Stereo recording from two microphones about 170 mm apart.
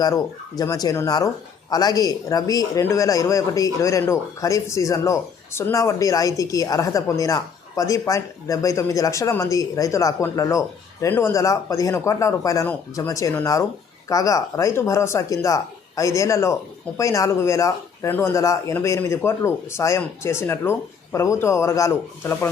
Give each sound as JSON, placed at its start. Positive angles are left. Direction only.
{"t": 0.0, "sound": "a man's voice", "side_deg": 20}